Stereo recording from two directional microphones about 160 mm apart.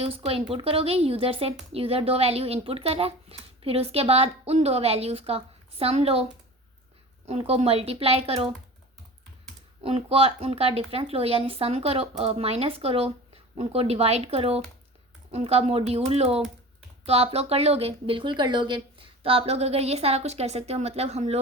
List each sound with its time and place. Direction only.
0.0 s speech: 35° right (ahead or behind)
7.3 s speech: 40° right (ahead or behind)
9.8 s speech: 40° right (ahead or behind)